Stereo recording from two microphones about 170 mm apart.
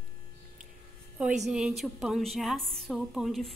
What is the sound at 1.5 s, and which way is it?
A woman's voice, 5° right (ahead or behind).